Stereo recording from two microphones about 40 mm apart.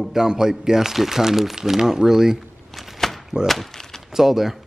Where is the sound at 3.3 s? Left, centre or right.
Left.